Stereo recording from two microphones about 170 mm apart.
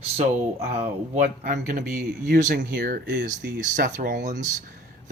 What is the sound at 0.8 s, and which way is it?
Speech, 45° right (ahead or behind).